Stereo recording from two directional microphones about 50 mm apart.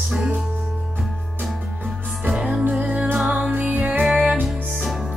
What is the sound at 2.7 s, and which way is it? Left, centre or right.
Music, right.